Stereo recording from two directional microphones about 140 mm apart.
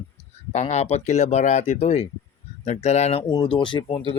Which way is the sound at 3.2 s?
35° left (ahead or behind).